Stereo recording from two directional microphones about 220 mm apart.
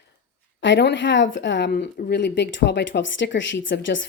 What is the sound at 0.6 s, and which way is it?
A woman's voice, 55° left (ahead or behind).